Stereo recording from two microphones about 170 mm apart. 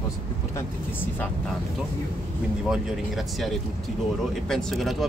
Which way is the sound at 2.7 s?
Centre (ahead or behind).